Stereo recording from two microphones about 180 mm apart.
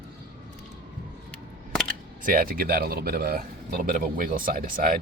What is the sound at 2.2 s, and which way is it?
A man's voice, 55° right (ahead or behind).